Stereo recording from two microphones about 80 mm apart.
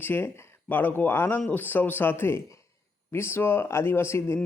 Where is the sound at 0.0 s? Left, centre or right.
Left.